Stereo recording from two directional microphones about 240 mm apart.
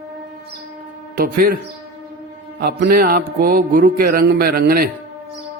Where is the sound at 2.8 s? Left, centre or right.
Right.